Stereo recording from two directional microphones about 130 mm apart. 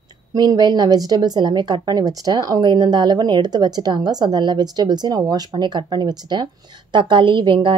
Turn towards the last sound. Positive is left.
turn(degrees=-40)  # may be behind; listen again after turning